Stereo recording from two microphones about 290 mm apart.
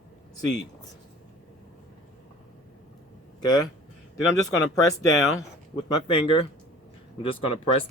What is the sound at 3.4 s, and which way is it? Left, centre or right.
Speech, centre.